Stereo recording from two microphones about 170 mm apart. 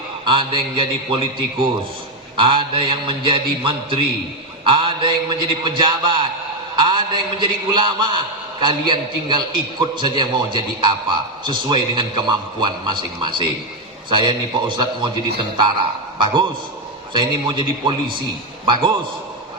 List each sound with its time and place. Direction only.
0.3 s a man's voice: 30° right (ahead or behind)
16.1 s a man's voice: 30° right (ahead or behind)